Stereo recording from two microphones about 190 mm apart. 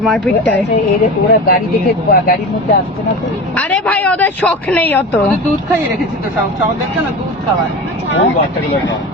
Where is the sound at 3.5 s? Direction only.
10° left (ahead or behind).